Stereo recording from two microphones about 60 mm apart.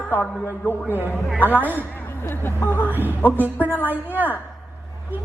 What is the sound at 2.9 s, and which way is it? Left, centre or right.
Speech, right.